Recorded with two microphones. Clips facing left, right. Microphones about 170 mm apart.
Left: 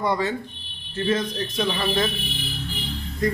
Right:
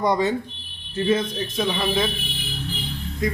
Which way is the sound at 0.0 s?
20° right (ahead or behind).